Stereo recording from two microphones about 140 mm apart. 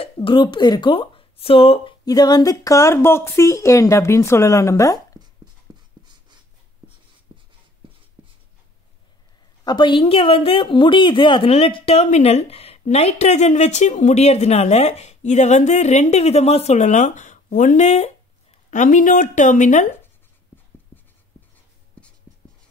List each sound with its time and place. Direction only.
0.0 s speech: 35° left (ahead or behind)
2.0 s speech: 25° left (ahead or behind)
5.7 s writing: 30° right (ahead or behind)
8.2 s writing: 40° right (ahead or behind)
9.7 s speech: 35° left (ahead or behind); by 19.9 s 60° left (ahead or behind)
20.5 s writing: 15° left (ahead or behind)
22.0 s writing: 10° left (ahead or behind)